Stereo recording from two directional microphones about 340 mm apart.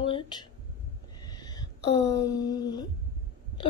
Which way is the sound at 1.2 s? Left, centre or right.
Centre.